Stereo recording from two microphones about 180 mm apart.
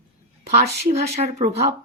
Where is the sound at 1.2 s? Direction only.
40° right (ahead or behind).